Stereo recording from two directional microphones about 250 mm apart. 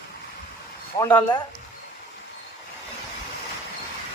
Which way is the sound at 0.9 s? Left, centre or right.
Centre.